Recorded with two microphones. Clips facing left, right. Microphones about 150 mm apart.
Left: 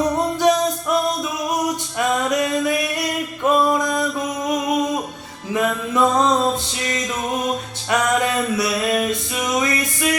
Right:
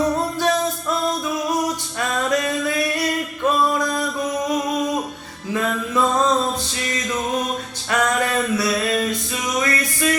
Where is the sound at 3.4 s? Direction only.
20° left (ahead or behind).